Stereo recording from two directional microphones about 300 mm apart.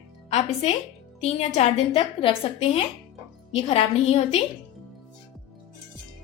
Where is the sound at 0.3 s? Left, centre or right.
Left.